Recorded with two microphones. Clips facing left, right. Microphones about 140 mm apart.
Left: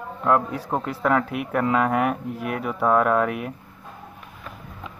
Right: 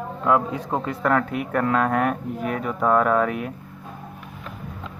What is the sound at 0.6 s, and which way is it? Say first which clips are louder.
Speech: right 1 dB; centre (ahead or behind).